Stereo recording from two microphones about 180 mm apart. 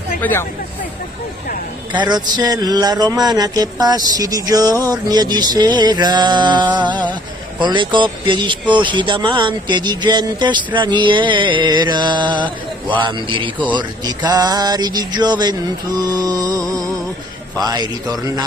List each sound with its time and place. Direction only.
0.2 s speech: 10° left (ahead or behind)
1.9 s speech: 25° right (ahead or behind)